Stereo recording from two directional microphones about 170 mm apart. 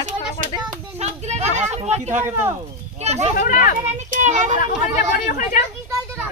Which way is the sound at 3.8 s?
45° right (ahead or behind).